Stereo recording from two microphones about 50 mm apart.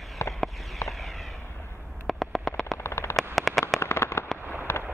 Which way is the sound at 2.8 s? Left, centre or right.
Left.